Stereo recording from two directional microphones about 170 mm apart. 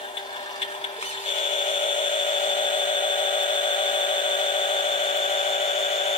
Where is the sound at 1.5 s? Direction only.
30° left (ahead or behind).